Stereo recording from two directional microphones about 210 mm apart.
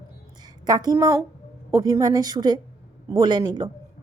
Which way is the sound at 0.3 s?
20° right (ahead or behind).